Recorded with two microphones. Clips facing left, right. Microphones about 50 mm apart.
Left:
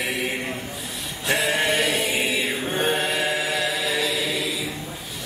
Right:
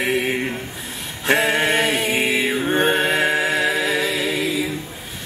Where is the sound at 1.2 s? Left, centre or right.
Right.